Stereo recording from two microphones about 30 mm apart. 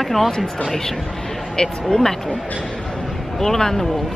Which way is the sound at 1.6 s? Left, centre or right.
Left.